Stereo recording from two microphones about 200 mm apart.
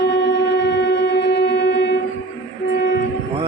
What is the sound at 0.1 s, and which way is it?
Music, 60° left (ahead or behind).